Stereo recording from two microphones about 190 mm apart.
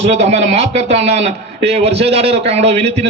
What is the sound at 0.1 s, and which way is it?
A man's voice, 35° right (ahead or behind).